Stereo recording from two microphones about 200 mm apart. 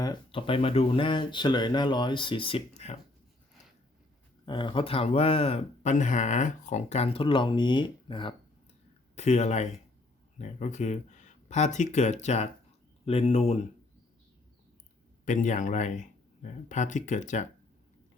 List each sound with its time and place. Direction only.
0.0 s speech: 25° left (ahead or behind)
4.4 s speech: 25° left (ahead or behind)
9.1 s speech: 35° left (ahead or behind)
15.2 s speech: 40° left (ahead or behind)